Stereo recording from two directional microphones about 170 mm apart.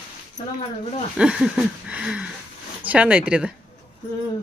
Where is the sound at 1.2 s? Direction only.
5° right (ahead or behind).